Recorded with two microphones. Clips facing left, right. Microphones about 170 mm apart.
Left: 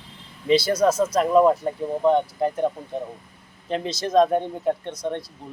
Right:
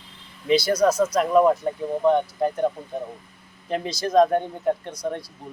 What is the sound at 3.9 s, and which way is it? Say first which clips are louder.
Speech: even; 25° left (ahead or behind).